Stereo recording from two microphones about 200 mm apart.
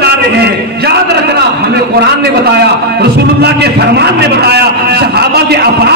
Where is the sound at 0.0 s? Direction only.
55° right (ahead or behind).